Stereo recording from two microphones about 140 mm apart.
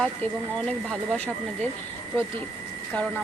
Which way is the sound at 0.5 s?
5° left (ahead or behind).